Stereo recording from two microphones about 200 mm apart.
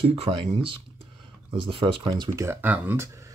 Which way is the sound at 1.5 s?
25° right (ahead or behind).